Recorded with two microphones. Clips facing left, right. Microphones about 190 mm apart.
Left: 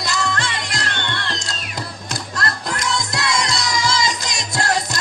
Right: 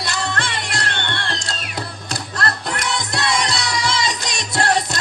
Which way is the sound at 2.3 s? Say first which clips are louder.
Right 1 dB; 60° right (ahead or behind).